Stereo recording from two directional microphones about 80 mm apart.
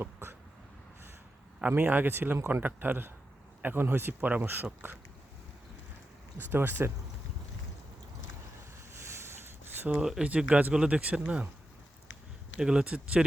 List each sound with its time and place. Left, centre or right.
0.0 s a sound: right
1.6 s a man's voice: centre
6.4 s a man's voice: right
9.2 s a sound: right
9.9 s speech: centre
12.5 s speech: centre